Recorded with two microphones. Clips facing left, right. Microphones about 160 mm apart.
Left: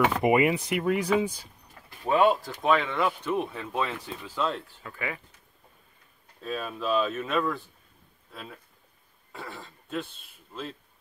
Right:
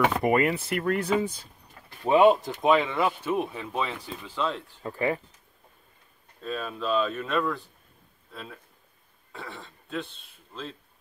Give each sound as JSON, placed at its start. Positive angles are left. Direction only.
{"t": 0.2, "sound": "speech", "side_deg": 10}
{"t": 2.0, "sound": "speech", "side_deg": -20}
{"t": 4.8, "sound": "speech", "side_deg": -35}
{"t": 6.4, "sound": "speech", "side_deg": 5}